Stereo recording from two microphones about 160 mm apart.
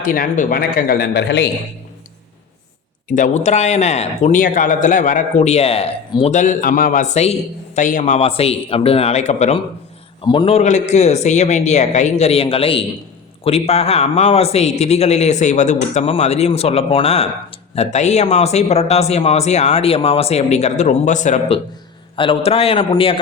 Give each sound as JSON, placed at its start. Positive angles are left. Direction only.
{"t": 0.0, "sound": "speech", "side_deg": 60}
{"t": 3.1, "sound": "a man's voice", "side_deg": 50}
{"t": 10.2, "sound": "a man's voice", "side_deg": 35}
{"t": 22.1, "sound": "a man's voice", "side_deg": 35}